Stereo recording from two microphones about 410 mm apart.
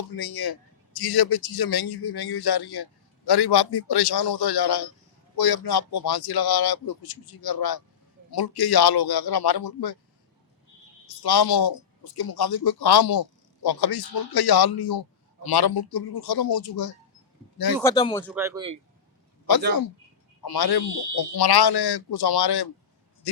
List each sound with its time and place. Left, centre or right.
0.1 s a man's voice: left
11.2 s a man's voice: left
17.8 s speech: centre
18.3 s speech: centre
20.4 s a man's voice: left